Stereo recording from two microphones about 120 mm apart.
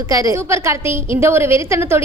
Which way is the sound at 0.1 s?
30° right (ahead or behind).